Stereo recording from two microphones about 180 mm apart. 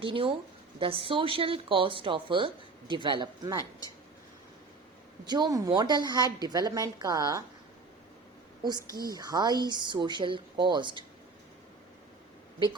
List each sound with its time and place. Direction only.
0.0 s a woman's voice: 30° right (ahead or behind)
5.2 s a woman's voice: 25° right (ahead or behind)
8.6 s a woman's voice: 20° right (ahead or behind)